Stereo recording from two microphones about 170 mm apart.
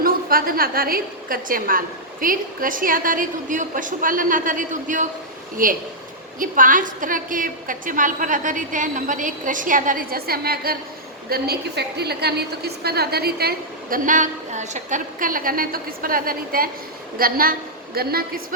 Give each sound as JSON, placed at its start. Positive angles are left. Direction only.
{"t": 0.0, "sound": "a woman's voice", "side_deg": -60}